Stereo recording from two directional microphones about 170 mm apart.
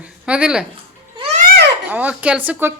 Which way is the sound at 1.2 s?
40° right (ahead or behind).